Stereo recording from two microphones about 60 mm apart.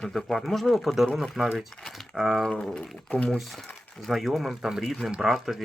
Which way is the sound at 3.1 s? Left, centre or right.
Centre.